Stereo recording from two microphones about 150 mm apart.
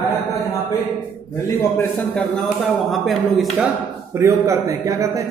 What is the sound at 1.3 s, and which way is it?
Speech, 15° left (ahead or behind).